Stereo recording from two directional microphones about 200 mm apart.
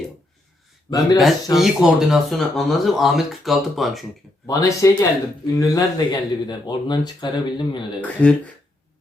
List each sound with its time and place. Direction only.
0.9 s speech: 15° left (ahead or behind)
1.5 s speech: centre (ahead or behind)
4.4 s speech: 15° left (ahead or behind)
8.0 s speech: 5° left (ahead or behind)